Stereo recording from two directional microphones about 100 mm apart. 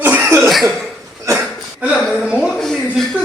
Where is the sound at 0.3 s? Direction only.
Centre (ahead or behind).